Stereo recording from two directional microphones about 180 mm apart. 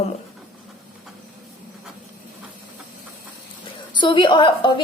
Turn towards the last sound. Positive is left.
turn(degrees=25)  # may be behind; listen again after turning